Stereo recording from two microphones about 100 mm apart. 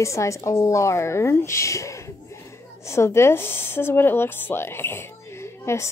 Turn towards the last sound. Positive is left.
turn(degrees=25)  # may be behind; listen again after turning